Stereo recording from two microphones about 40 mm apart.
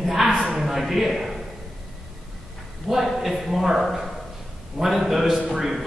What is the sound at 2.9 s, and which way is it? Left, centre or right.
A woman's voice, centre.